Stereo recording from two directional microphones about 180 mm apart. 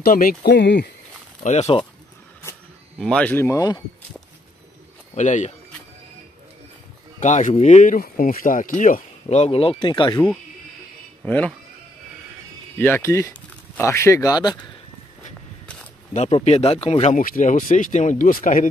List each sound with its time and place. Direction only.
0.0 s speech: 55° left (ahead or behind); by 0.8 s 70° left (ahead or behind)
1.4 s speech: 40° left (ahead or behind)
3.0 s speech: 5° left (ahead or behind)
5.1 s speech: 45° left (ahead or behind)
7.2 s speech: 45° left (ahead or behind); by 10.2 s 25° left (ahead or behind)
11.2 s speech: 10° left (ahead or behind)
12.7 s speech: 10° left (ahead or behind)
16.1 s speech: 35° left (ahead or behind)
17.2 s speech: 50° left (ahead or behind)